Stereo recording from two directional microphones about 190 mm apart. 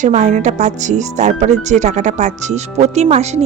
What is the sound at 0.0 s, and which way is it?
Speech, 40° right (ahead or behind).